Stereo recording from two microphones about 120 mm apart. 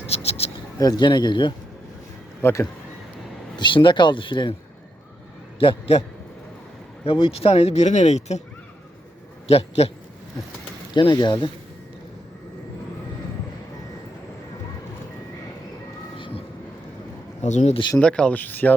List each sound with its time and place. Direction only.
0.1 s a sound: 55° left (ahead or behind)
0.8 s speech: 35° left (ahead or behind)
2.4 s speech: 25° left (ahead or behind)
3.6 s speech: 45° left (ahead or behind)
5.5 s a man's voice: 50° left (ahead or behind)
7.0 s speech: 50° left (ahead or behind); by 8.4 s 70° left (ahead or behind)
9.5 s speech: 60° left (ahead or behind)
10.9 s speech: 40° left (ahead or behind)
16.1 s vehicle: 45° left (ahead or behind)
17.4 s speech: 75° left (ahead or behind)
18.0 s speech: 10° left (ahead or behind)